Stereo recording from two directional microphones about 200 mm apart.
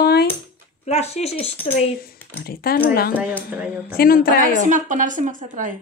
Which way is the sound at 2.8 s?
50° left (ahead or behind).